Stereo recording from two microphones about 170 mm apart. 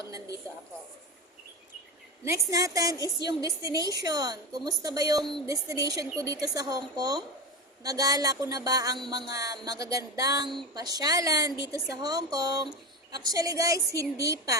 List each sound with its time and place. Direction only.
2.2 s a woman's voice: 20° right (ahead or behind)